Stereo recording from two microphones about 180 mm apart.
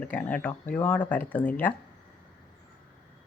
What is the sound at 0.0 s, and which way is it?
Speech, 10° left (ahead or behind).